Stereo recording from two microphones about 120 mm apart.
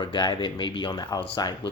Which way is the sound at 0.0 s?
40° left (ahead or behind).